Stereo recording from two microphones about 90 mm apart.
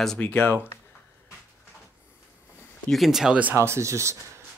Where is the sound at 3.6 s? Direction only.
30° right (ahead or behind).